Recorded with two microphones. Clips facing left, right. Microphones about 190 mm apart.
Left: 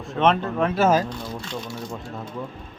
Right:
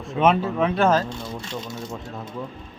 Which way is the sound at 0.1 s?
5° right (ahead or behind).